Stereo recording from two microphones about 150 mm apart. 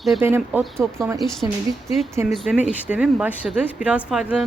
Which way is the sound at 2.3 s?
Centre (ahead or behind).